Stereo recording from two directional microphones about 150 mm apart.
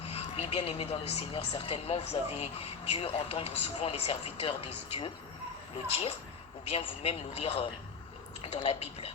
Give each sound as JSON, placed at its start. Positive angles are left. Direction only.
{"t": 0.0, "sound": "speech", "side_deg": 40}